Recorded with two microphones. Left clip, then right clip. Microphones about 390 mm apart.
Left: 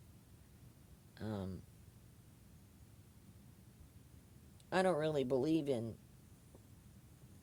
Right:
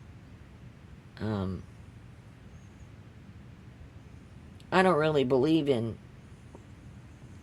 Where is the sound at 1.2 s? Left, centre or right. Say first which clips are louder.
Right 11 dB; left.